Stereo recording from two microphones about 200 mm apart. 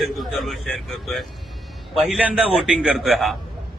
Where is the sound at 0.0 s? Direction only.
Centre (ahead or behind).